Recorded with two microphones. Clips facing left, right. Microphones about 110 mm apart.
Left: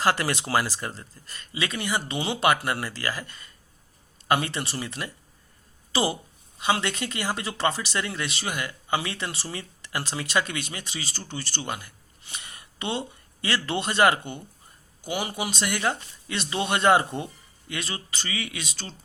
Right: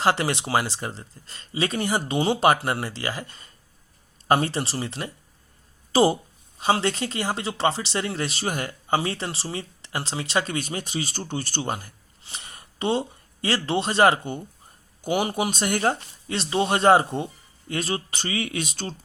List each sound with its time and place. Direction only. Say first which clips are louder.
0.0 s speech: right 2 dB; 25° right (ahead or behind)
1.6 s speech: right 4 dB; 40° right (ahead or behind)
5.9 s speech: right 7 dB; 45° right (ahead or behind)
6.6 s speech: right 3 dB; 35° right (ahead or behind)
11.6 s a sound: right 4 dB; 35° right (ahead or behind)
13.6 s speech: right 2 dB; 25° right (ahead or behind)
15.0 s speech: right 6 dB; 50° right (ahead or behind); by 17.7 s 25° right (ahead or behind)
17.7 s speech: right 6 dB; 45° right (ahead or behind)